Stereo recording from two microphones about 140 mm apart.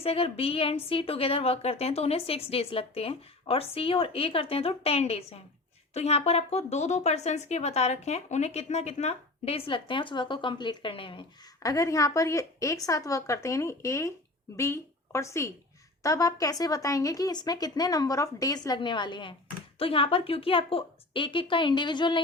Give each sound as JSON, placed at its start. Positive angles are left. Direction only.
{"t": 0.0, "sound": "a woman's voice", "side_deg": 45}
{"t": 11.6, "sound": "a woman's voice", "side_deg": 25}